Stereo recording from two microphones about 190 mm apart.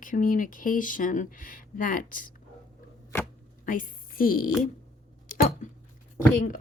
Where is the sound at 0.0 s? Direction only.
45° left (ahead or behind).